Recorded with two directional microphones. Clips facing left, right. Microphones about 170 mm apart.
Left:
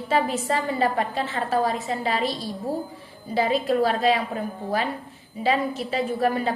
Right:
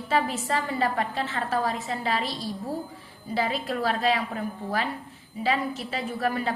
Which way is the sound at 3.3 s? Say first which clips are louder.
Left 6 dB; 20° left (ahead or behind).